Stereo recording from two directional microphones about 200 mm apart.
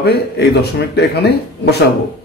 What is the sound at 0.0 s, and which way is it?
Speech, 55° left (ahead or behind).